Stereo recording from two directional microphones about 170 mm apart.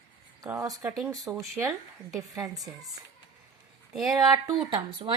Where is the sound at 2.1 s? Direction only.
20° right (ahead or behind).